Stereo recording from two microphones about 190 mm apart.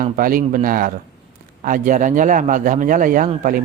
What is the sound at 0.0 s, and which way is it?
Speech, 45° right (ahead or behind).